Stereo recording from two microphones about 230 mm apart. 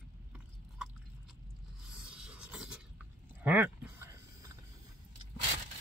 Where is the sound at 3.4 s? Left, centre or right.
Centre.